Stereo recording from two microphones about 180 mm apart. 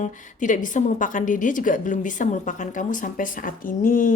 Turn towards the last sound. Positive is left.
turn(degrees=50)  # may be behind; listen again after turning